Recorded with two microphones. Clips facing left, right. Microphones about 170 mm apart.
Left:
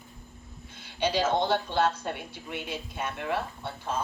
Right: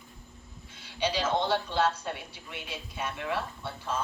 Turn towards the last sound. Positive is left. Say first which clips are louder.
# left 1 dB
turn(degrees=50)  # may be behind; listen again after turning